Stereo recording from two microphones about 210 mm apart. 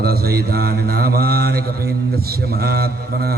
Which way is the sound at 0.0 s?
45° right (ahead or behind).